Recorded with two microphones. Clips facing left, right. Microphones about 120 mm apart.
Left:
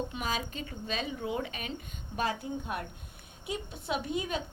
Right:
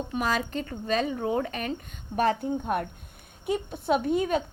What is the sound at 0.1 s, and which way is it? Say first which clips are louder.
A woman's voice: right 7 dB; 50° right (ahead or behind).